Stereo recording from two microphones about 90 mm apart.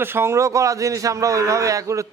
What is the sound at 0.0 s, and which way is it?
A man's voice, 25° right (ahead or behind).